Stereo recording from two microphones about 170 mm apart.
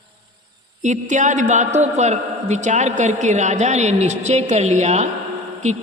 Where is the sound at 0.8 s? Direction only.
45° right (ahead or behind).